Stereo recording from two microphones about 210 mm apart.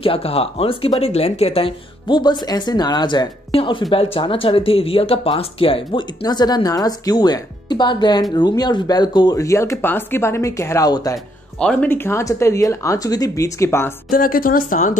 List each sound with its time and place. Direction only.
0.0 s speech: 25° left (ahead or behind)
14.1 s speech: 40° left (ahead or behind)